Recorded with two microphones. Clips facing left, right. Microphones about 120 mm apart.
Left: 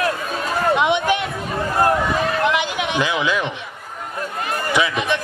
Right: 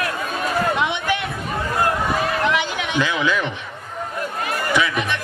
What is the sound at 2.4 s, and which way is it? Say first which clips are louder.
Speech: left 1 dB; 20° left (ahead or behind).